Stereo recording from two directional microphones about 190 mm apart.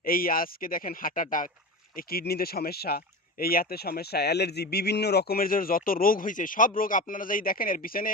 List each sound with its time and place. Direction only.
0.0 s speech: 50° left (ahead or behind)